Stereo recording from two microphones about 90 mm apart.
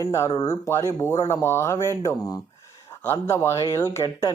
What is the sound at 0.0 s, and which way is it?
Speech, 35° left (ahead or behind).